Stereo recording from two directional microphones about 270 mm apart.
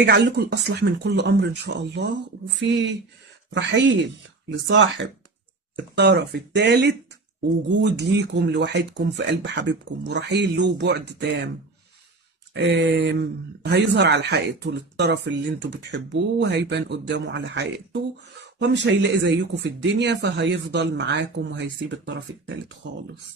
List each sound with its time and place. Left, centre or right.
0.0 s speech: right
12.5 s speech: right